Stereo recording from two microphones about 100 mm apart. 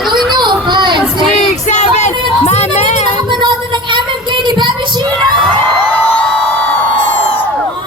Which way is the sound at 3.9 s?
50° right (ahead or behind).